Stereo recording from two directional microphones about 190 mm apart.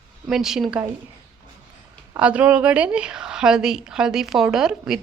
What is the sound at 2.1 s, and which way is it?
A woman's voice, 5° right (ahead or behind).